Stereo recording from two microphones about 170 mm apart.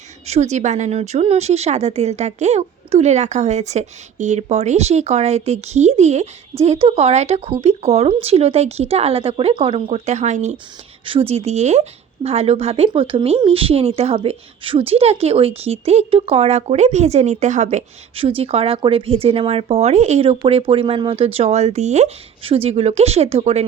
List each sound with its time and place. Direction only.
0.3 s speech: 40° right (ahead or behind)